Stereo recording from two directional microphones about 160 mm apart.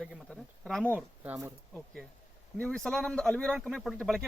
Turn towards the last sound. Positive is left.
turn(degrees=0)  # may be behind; listen again after turning